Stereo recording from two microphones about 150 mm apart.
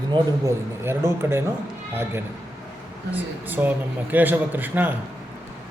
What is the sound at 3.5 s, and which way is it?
A man's voice, 10° right (ahead or behind).